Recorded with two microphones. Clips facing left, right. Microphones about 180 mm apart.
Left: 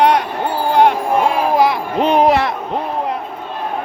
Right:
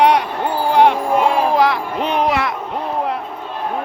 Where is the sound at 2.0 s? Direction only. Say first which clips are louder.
Left 6 dB; 30° left (ahead or behind).